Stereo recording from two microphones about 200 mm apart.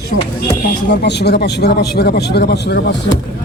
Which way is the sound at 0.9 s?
55° left (ahead or behind).